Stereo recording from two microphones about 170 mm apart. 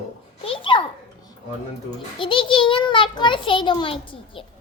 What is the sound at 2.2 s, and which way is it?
A child's voice, 30° left (ahead or behind).